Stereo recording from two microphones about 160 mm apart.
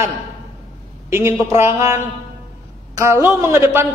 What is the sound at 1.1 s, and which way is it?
A man's voice, 15° right (ahead or behind).